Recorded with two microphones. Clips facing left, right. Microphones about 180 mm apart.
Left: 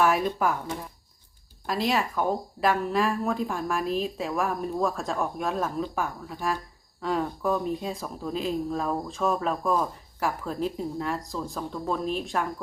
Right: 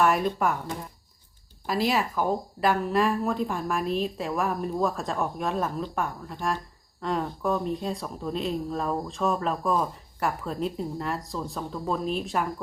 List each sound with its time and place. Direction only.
0.0 s speech: centre (ahead or behind)